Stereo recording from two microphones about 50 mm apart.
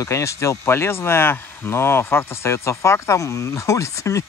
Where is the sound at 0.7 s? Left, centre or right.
Left.